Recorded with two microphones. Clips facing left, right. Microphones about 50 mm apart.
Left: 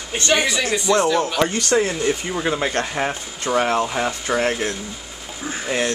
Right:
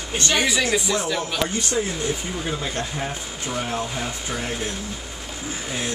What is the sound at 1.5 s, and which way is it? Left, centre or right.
Speech, left.